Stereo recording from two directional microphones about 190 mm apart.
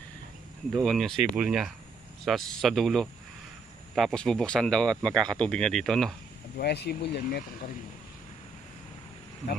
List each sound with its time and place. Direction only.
0.7 s speech: centre (ahead or behind)
6.6 s speech: 60° left (ahead or behind)